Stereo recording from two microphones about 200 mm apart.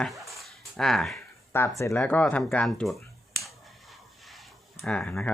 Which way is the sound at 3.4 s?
Centre (ahead or behind).